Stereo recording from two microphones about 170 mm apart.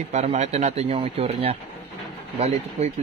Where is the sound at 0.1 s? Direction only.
40° right (ahead or behind).